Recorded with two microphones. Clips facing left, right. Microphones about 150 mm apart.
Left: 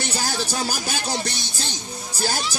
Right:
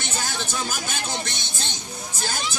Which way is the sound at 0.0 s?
40° left (ahead or behind).